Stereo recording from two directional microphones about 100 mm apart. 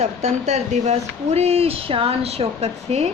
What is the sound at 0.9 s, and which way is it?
Speech, 90° right.